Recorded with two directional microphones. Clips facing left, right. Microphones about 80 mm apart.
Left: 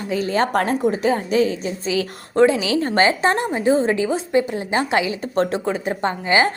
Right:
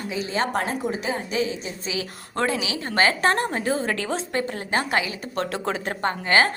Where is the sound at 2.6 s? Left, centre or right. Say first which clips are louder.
Left 5 dB; left.